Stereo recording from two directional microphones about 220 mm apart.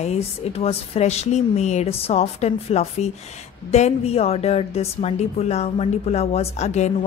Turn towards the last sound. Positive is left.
turn(degrees=30)  # may be behind; listen again after turning